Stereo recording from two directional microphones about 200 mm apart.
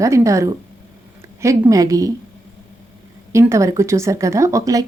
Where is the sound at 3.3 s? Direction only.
15° right (ahead or behind).